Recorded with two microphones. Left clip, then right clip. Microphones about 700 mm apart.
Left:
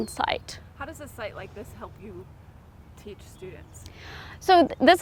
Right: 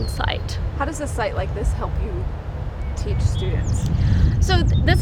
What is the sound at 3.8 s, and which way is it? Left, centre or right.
Speech, left.